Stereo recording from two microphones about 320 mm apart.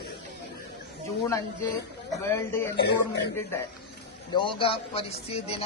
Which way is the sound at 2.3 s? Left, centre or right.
Centre.